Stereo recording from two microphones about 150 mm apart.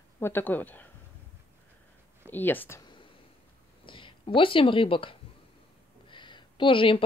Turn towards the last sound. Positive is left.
turn(degrees=35)  # may be behind; listen again after turning